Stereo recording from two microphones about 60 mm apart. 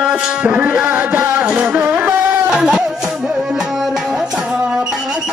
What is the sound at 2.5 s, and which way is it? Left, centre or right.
Music, centre.